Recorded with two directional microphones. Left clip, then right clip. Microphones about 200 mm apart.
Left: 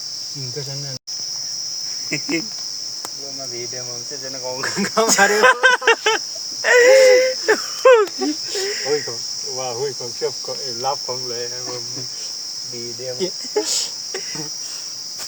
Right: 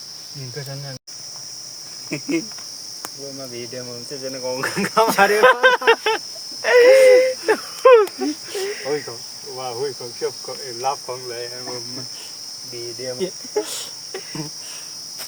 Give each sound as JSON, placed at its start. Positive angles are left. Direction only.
{"t": 2.0, "sound": "speech", "side_deg": -35}
{"t": 4.4, "sound": "cricket", "side_deg": -50}
{"t": 5.3, "sound": "a sound", "side_deg": 0}
{"t": 8.2, "sound": "speech", "side_deg": 0}
{"t": 9.6, "sound": "cricket", "side_deg": -10}
{"t": 13.1, "sound": "cricket", "side_deg": 10}